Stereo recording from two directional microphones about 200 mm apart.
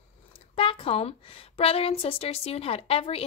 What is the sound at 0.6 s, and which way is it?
A woman's voice, 30° left (ahead or behind).